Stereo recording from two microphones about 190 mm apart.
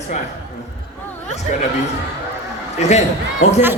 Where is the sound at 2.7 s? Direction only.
35° left (ahead or behind).